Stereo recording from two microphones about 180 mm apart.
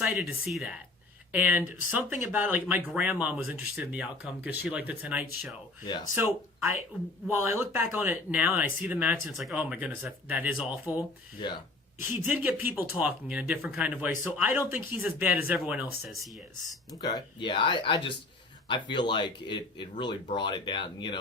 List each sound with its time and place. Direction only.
0.0 s speech: centre (ahead or behind)
17.0 s speech: 25° left (ahead or behind)